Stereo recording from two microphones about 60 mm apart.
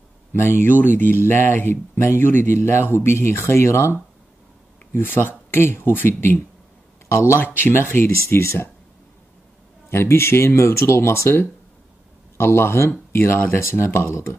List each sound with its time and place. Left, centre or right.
0.3 s speech: left
4.9 s speech: left
7.1 s speech: left
7.3 s speech: left
9.8 s speech: left